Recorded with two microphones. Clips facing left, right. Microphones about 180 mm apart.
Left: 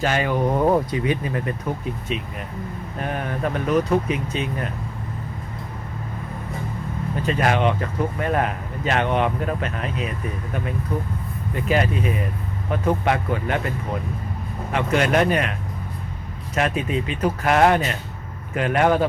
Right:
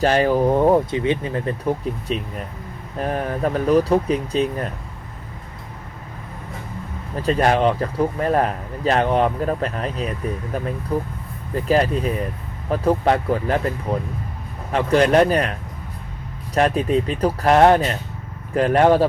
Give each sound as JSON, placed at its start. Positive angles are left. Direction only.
{"t": 0.0, "sound": "speech", "side_deg": -35}
{"t": 7.2, "sound": "speech", "side_deg": -35}
{"t": 16.6, "sound": "speech", "side_deg": -35}